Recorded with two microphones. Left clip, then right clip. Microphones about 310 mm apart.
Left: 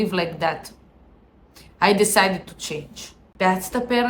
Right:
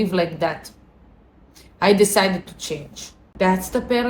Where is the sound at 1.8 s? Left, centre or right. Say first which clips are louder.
Right 1 dB; centre.